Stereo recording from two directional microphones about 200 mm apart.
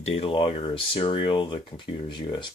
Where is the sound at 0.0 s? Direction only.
30° left (ahead or behind).